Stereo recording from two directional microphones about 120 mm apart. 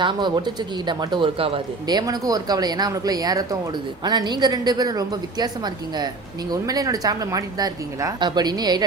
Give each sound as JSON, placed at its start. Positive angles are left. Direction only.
{"t": 0.0, "sound": "a woman's voice", "side_deg": -40}
{"t": 1.9, "sound": "a woman's voice", "side_deg": -35}